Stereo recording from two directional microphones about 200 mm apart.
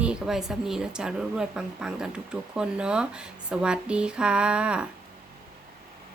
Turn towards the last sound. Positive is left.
turn(degrees=-5)  # may be behind; listen again after turning